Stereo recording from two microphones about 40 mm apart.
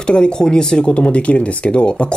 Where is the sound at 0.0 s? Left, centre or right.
Left.